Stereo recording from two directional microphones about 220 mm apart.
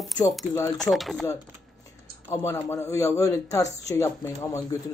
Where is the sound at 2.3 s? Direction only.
10° left (ahead or behind).